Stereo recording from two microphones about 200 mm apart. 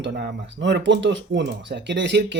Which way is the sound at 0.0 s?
60° right (ahead or behind).